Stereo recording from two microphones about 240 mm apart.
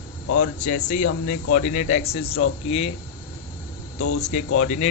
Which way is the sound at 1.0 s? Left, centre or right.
Left.